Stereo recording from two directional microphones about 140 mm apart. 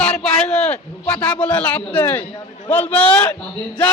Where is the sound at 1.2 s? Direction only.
10° left (ahead or behind).